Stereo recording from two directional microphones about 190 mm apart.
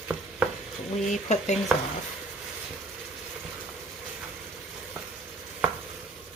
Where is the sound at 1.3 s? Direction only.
35° left (ahead or behind).